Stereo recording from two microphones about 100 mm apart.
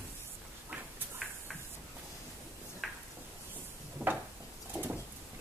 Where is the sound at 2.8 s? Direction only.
Centre (ahead or behind).